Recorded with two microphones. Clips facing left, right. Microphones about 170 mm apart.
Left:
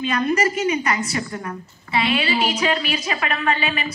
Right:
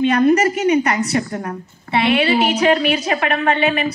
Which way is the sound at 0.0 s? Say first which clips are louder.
Right 7 dB; 60° right (ahead or behind).